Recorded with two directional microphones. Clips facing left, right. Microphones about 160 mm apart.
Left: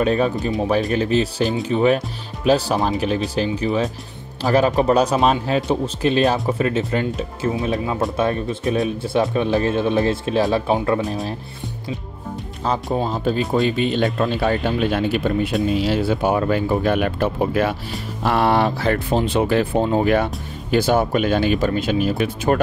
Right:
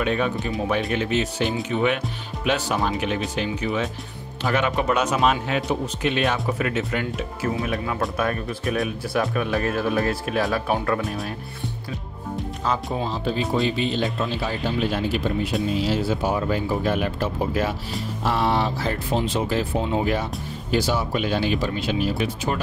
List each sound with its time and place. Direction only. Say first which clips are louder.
0.0 s speech: left 5 dB; 35° left (ahead or behind)
12.9 s speech: left 5 dB; 45° left (ahead or behind)